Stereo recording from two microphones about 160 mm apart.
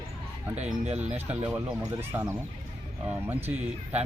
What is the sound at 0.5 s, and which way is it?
Speech, 45° right (ahead or behind).